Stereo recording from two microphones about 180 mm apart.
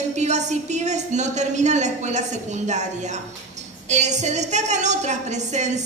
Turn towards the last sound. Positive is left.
turn(degrees=-40)  # may be behind; listen again after turning